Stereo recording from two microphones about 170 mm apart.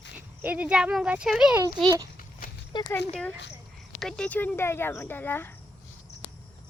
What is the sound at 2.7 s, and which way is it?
Speech, 25° left (ahead or behind).